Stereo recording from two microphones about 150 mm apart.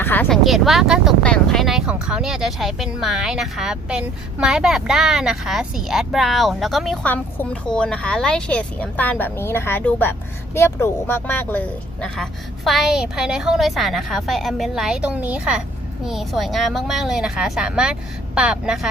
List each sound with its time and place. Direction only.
0.0 s vehicle: 10° left (ahead or behind)
0.3 s speech: centre (ahead or behind)